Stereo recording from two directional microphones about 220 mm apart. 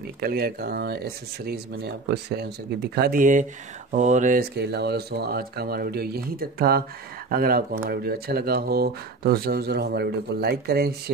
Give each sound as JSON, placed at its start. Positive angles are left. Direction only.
{"t": 0.2, "sound": "speech", "side_deg": -45}